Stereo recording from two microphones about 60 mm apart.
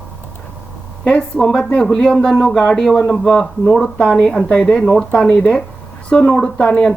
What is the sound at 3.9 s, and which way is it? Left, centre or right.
A woman's voice, centre.